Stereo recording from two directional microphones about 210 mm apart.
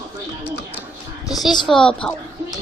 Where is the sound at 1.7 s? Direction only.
5° left (ahead or behind).